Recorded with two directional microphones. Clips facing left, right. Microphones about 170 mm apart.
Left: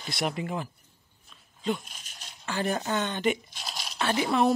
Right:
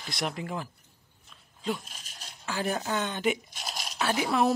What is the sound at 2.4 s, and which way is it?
Speech, 5° right (ahead or behind).